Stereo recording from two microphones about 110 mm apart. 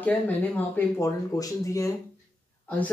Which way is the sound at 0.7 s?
30° left (ahead or behind).